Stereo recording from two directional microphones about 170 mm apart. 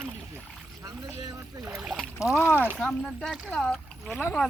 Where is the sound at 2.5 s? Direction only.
10° left (ahead or behind).